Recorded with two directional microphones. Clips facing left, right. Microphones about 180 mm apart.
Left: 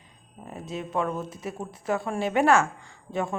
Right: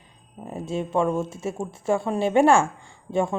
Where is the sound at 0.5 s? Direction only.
30° right (ahead or behind).